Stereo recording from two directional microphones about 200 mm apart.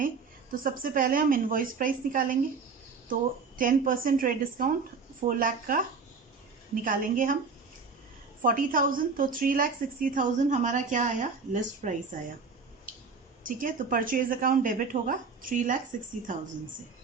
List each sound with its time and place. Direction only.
0.6 s speech: 45° right (ahead or behind)
6.8 s speech: 40° right (ahead or behind)
8.4 s a woman's voice: 45° right (ahead or behind)
13.4 s a woman's voice: 45° right (ahead or behind)